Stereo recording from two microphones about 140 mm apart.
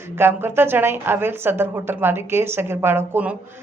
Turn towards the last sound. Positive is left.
turn(degrees=-15)  # may be behind; listen again after turning